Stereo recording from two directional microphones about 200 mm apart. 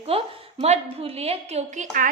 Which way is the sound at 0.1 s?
30° right (ahead or behind).